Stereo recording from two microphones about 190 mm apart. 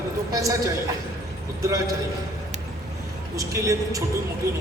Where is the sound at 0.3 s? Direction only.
15° right (ahead or behind).